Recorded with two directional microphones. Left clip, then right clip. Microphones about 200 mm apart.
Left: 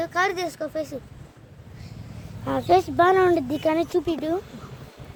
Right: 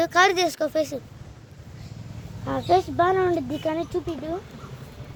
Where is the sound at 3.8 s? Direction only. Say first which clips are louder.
Left 5 dB; 60° left (ahead or behind).